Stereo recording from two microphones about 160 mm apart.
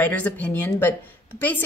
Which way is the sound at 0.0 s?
10° left (ahead or behind).